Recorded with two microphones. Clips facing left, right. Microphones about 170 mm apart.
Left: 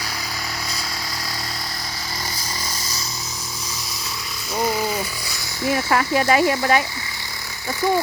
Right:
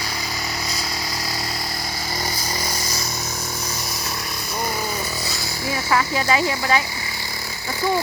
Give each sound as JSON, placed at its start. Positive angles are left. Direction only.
{"t": 5.7, "sound": "speech", "side_deg": 50}